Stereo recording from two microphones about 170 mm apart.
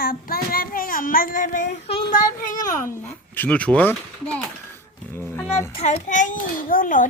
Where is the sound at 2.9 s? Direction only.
10° left (ahead or behind).